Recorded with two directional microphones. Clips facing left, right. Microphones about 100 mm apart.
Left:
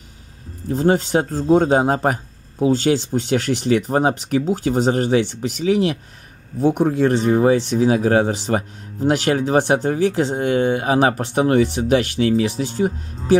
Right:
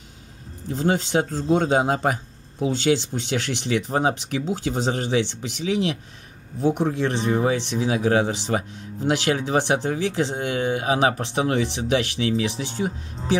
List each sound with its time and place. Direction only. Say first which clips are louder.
0.7 s speech: left 5 dB; 40° left (ahead or behind)